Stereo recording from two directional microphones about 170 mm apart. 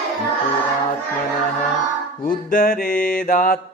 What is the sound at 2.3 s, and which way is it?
Music, 55° left (ahead or behind).